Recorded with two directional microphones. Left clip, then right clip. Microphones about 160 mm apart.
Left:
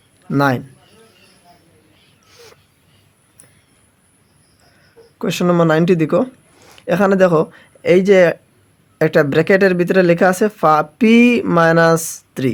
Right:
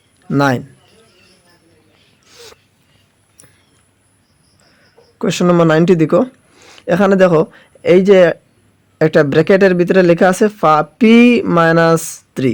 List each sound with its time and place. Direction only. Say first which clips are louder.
0.3 s a man's voice: right 2 dB; 20° right (ahead or behind)
2.3 s a sound: right 5 dB; 20° right (ahead or behind)
5.1 s speech: right 3 dB; 20° right (ahead or behind)